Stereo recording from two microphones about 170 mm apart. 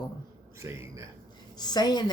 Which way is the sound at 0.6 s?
20° right (ahead or behind).